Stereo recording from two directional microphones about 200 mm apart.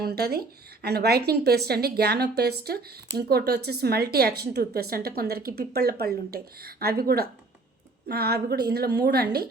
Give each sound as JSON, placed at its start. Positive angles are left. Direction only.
{"t": 0.0, "sound": "speech", "side_deg": -50}